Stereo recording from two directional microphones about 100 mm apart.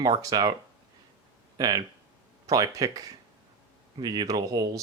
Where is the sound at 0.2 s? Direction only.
40° right (ahead or behind).